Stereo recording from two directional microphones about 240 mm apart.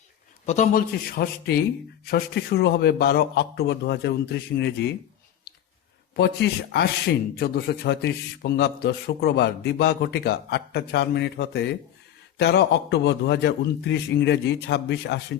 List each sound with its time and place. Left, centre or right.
0.4 s a man's voice: left
6.1 s a man's voice: left